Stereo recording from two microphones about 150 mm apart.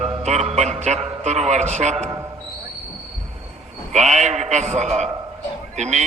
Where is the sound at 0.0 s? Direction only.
45° right (ahead or behind).